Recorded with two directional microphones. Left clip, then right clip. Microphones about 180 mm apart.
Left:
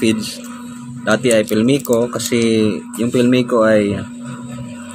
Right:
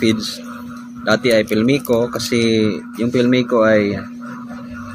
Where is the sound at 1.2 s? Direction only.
10° left (ahead or behind).